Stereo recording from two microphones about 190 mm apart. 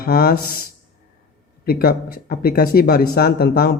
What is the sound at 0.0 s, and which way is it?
Speech, 50° left (ahead or behind).